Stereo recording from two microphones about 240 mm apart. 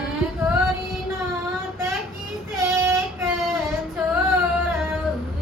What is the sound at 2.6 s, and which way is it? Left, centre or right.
Child singing, centre.